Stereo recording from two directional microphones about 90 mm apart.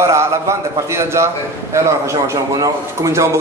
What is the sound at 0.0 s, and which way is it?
A man's voice, 30° right (ahead or behind).